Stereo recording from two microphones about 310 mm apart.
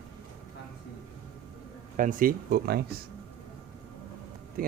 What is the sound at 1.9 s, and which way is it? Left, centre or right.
Speech, right.